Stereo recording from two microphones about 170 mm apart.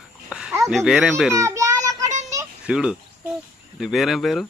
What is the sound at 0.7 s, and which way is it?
Speech, centre (ahead or behind).